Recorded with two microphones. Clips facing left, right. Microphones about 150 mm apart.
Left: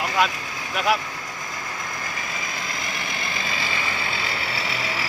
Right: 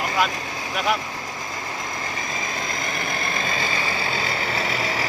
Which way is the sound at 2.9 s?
45° right (ahead or behind).